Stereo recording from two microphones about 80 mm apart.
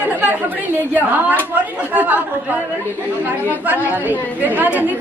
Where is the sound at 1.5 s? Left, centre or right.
Right.